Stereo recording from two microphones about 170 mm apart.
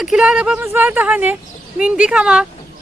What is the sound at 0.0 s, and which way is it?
A woman's voice, 5° right (ahead or behind).